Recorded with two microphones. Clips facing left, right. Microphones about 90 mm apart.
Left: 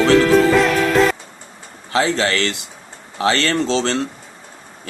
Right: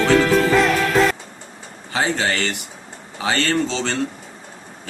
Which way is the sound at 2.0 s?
90° left.